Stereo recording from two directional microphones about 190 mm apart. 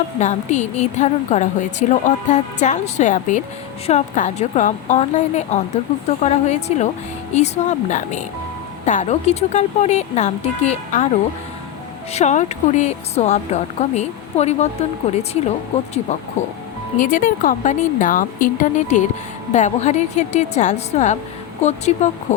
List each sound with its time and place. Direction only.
0.2 s a woman's voice: 40° left (ahead or behind)
12.1 s a woman's voice: 40° left (ahead or behind)
17.0 s a woman's voice: 45° left (ahead or behind)